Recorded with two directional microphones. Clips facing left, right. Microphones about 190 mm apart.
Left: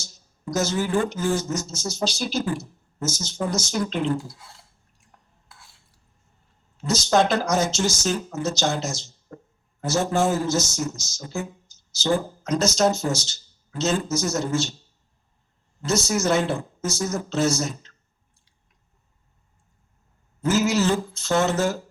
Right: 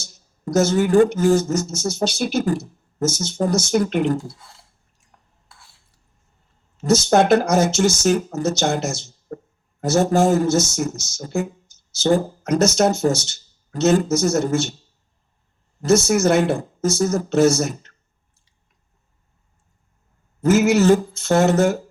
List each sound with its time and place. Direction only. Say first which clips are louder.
0.4 s speech: right 7 dB; 50° right (ahead or behind)
6.8 s speech: right 5 dB; 55° right (ahead or behind)
15.8 s speech: right 7 dB; 55° right (ahead or behind)
20.4 s speech: right 6 dB; 55° right (ahead or behind)